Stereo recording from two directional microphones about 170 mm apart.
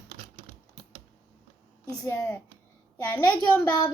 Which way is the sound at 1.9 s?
10° left (ahead or behind).